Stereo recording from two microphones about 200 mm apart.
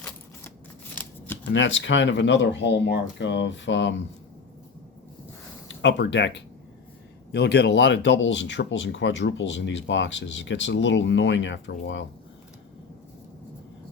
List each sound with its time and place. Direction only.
1.5 s speech: 65° left (ahead or behind)
5.6 s speech: 65° left (ahead or behind)